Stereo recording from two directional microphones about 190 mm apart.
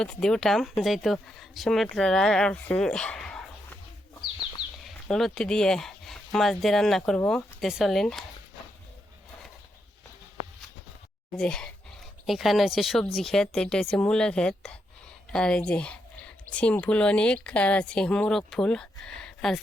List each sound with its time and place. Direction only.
0.0 s speech: 5° left (ahead or behind)
5.0 s speech: 5° left (ahead or behind)
11.3 s speech: 5° left (ahead or behind)